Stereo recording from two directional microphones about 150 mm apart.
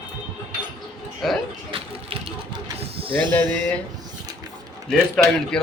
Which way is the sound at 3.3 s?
15° left (ahead or behind).